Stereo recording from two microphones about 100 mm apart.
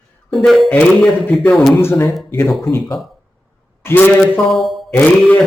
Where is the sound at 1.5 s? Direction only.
Centre (ahead or behind).